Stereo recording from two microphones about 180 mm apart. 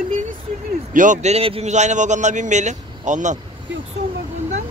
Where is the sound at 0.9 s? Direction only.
45° right (ahead or behind).